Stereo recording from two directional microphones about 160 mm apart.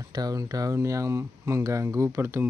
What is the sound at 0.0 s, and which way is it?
Speech, 25° right (ahead or behind).